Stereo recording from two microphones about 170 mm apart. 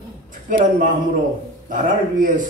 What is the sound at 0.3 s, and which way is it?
A man's voice, 50° right (ahead or behind).